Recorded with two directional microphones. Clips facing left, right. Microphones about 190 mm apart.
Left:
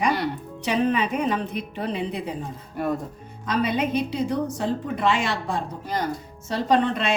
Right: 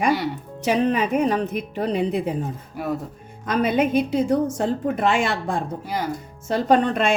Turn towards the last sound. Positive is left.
turn(degrees=-50)  # may be behind; listen again after turning